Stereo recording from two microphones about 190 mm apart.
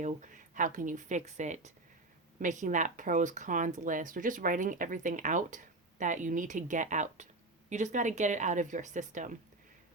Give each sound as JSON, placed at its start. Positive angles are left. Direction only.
{"t": 0.0, "sound": "speech", "side_deg": -40}